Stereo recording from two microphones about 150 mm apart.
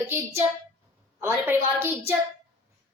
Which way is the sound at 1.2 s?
15° right (ahead or behind).